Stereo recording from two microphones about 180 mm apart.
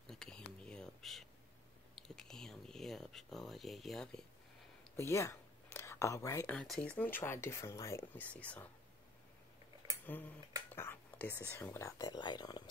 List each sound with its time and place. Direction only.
0.0 s a sound: 5° left (ahead or behind)
4.9 s speech: 15° left (ahead or behind)
10.0 s speech: 10° left (ahead or behind)
10.7 s whispering: 10° left (ahead or behind)
11.5 s speech: 10° left (ahead or behind)